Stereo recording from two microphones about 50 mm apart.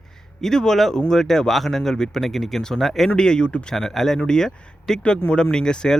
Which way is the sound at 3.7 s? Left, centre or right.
Centre.